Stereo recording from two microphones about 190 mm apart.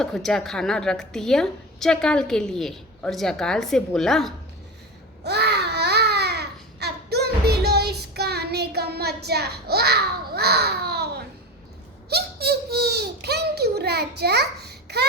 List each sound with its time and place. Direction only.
0.0 s a woman's voice: centre (ahead or behind)
5.2 s babbling: 60° right (ahead or behind)
12.0 s a sound: 55° right (ahead or behind)